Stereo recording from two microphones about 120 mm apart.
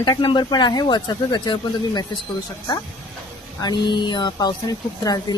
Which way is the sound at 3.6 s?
35° left (ahead or behind).